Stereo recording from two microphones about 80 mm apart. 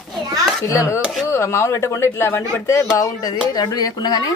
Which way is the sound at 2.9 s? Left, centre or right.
Left.